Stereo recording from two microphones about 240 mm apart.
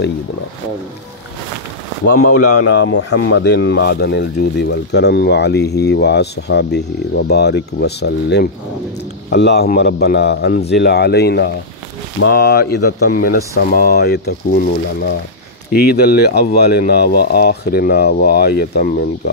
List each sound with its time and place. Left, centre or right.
2.0 s speech: left
2.6 s speech: left
3.0 s speech: left
3.3 s speech: left